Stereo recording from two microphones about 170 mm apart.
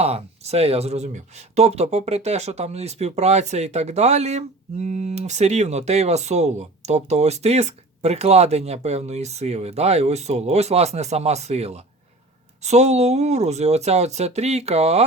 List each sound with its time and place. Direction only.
0.0 s speech: 40° right (ahead or behind)